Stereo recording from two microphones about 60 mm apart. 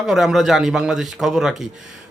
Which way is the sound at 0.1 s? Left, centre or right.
Centre.